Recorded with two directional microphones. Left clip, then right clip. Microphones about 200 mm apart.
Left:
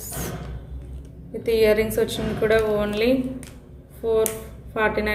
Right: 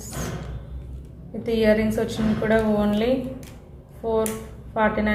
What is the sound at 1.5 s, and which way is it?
Speech, 50° left (ahead or behind).